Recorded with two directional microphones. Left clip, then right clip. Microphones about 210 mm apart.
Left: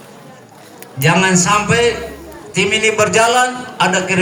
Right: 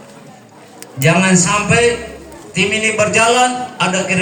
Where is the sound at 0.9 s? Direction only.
40° left (ahead or behind).